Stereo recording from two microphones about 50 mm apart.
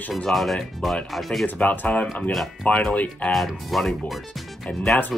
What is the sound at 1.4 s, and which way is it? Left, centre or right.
Speech, left.